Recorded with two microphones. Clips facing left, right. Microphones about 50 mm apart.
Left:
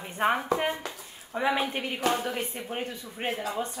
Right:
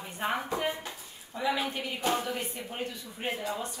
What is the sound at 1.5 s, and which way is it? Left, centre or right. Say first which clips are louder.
Speech: left 2 dB; left.